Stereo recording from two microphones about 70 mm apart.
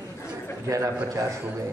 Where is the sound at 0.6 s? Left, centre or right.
Right.